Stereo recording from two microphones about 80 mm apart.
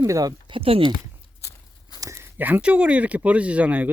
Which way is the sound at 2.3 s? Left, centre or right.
Right.